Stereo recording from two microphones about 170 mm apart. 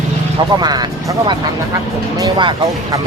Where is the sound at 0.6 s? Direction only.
25° right (ahead or behind).